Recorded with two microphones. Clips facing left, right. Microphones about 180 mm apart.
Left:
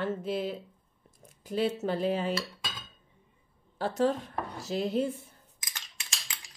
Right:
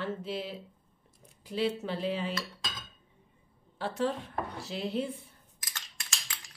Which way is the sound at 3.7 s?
40° left (ahead or behind).